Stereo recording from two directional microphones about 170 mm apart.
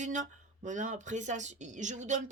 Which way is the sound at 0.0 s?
45° right (ahead or behind).